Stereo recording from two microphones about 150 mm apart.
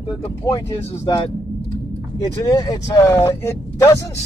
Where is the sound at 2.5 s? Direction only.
25° left (ahead or behind).